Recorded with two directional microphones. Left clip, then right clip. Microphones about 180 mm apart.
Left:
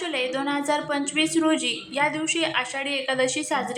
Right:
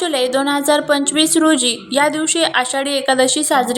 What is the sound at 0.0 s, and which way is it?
A woman's voice, 35° right (ahead or behind).